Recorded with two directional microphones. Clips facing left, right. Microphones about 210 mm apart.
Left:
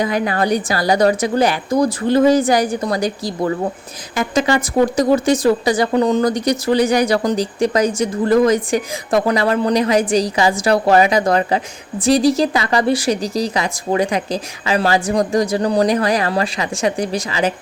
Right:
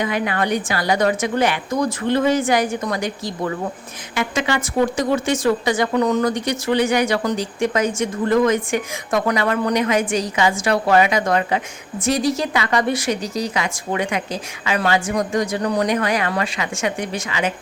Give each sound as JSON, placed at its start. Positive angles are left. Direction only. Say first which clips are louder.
{"t": 0.0, "sound": "speech", "louder": "left 3 dB", "side_deg": 35}